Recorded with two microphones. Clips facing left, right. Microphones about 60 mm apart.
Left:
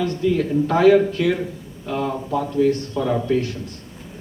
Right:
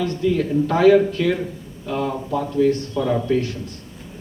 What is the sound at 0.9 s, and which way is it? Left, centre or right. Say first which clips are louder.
Speech: even; centre.